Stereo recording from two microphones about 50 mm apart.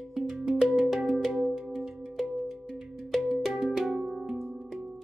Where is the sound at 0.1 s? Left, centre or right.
Centre.